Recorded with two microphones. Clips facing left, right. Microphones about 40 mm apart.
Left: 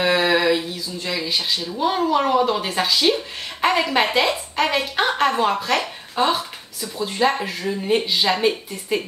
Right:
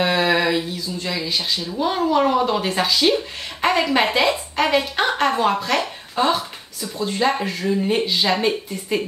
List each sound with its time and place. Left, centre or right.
0.0 s a woman's voice: centre